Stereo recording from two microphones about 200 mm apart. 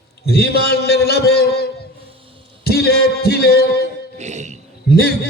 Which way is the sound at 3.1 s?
50° left (ahead or behind).